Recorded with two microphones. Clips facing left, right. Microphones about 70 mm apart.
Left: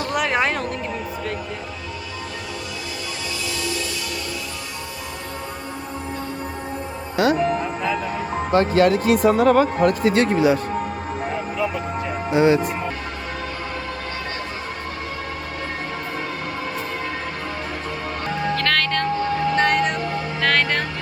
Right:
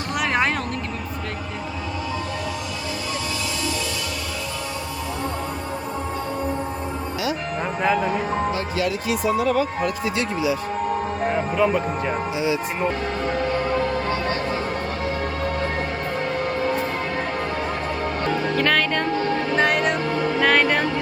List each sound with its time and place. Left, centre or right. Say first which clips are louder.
0.1 s a sound: even; centre
7.6 s music: right 3 dB; right
8.5 s speech: left 8 dB; left
11.5 s music: right 4 dB; right
12.3 s speech: left 11 dB; left
18.5 s music: even; centre
20.4 s speech: right 1 dB; centre